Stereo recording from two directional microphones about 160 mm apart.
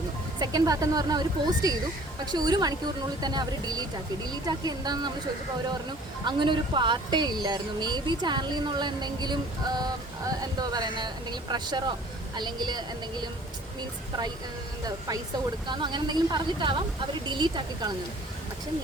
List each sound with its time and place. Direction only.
0.3 s speech: 25° right (ahead or behind)
6.2 s speech: 30° right (ahead or behind)
14.8 s speech: 20° right (ahead or behind)